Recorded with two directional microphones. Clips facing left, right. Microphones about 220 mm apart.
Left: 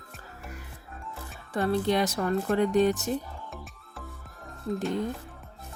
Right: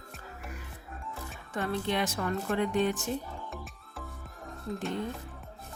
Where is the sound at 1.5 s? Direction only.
35° left (ahead or behind).